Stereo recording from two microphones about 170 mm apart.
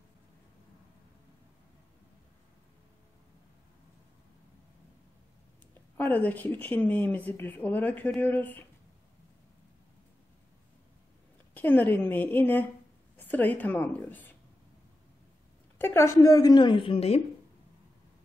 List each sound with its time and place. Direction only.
5.9 s speech: 10° left (ahead or behind)
11.5 s speech: 10° left (ahead or behind)
15.8 s a woman's voice: 15° left (ahead or behind); by 17.2 s 35° left (ahead or behind)